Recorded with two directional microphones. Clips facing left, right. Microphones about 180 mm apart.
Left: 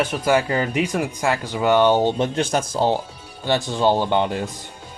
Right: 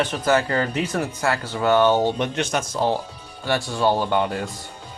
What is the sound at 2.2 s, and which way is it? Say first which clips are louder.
Speech: left 3 dB; 30° left (ahead or behind).